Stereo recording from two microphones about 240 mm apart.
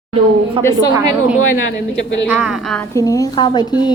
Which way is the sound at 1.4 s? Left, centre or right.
Left.